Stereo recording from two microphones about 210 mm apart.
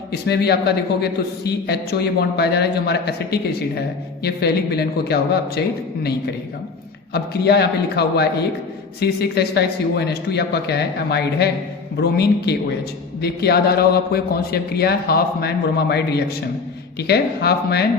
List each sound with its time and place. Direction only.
0.1 s a man's voice: 50° left (ahead or behind)